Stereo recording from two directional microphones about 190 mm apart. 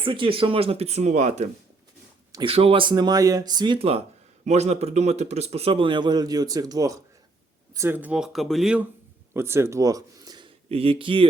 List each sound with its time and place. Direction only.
0.0 s speech: 25° right (ahead or behind)